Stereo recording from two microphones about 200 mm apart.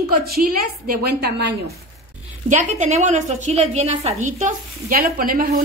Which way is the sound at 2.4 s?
35° right (ahead or behind).